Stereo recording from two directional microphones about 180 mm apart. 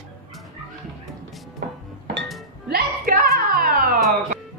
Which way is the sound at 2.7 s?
55° right (ahead or behind).